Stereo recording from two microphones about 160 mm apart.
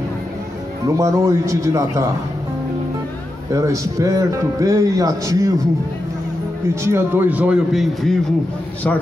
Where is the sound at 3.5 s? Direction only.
20° right (ahead or behind).